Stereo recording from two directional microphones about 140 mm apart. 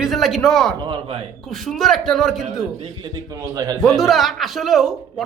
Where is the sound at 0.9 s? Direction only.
45° right (ahead or behind).